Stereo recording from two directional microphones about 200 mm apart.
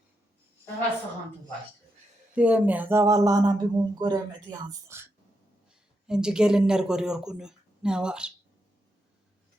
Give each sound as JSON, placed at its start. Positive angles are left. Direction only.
{"t": 2.3, "sound": "speech", "side_deg": -5}
{"t": 6.1, "sound": "speech", "side_deg": -5}